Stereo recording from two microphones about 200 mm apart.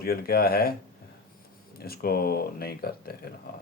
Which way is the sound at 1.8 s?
50° left (ahead or behind).